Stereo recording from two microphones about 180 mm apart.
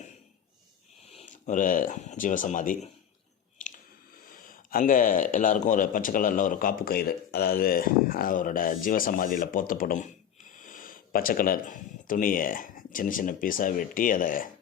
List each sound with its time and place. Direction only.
1.1 s speech: 45° left (ahead or behind)
4.3 s a man's voice: 50° left (ahead or behind)